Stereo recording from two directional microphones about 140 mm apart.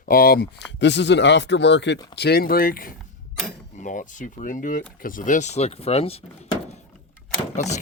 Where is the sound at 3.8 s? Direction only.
65° left (ahead or behind); by 6.2 s 45° left (ahead or behind).